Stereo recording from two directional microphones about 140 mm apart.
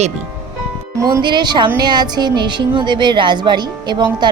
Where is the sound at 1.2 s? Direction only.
35° right (ahead or behind).